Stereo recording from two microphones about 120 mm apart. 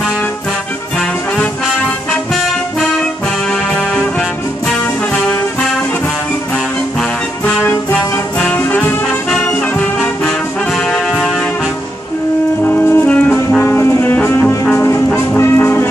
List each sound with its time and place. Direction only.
7.0 s music: 10° left (ahead or behind)
12.6 s brass instrument: 15° left (ahead or behind)
15.1 s music: 20° left (ahead or behind)